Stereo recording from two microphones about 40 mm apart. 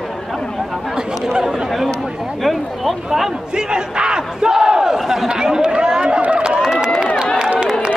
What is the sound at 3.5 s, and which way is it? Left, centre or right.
Battle cry, right.